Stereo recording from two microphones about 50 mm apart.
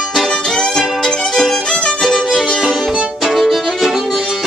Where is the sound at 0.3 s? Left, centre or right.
Centre.